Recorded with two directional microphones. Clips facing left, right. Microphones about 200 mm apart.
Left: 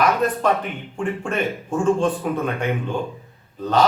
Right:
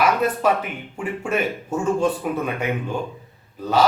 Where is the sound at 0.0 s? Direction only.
5° right (ahead or behind).